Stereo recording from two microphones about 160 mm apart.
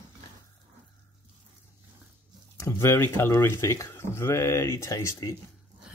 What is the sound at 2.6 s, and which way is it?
Speech, 15° left (ahead or behind).